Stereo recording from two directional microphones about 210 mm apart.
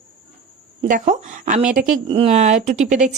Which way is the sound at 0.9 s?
35° right (ahead or behind).